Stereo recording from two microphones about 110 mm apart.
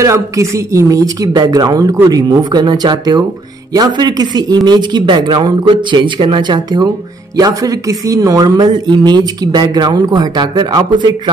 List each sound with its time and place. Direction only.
0.0 s speech: 25° right (ahead or behind); by 11.1 s 45° right (ahead or behind)